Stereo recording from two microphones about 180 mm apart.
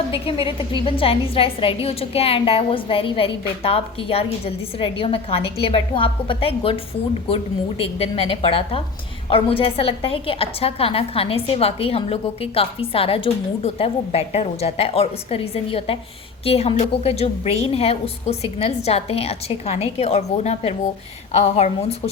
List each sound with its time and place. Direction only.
0.1 s a woman's voice: 30° left (ahead or behind)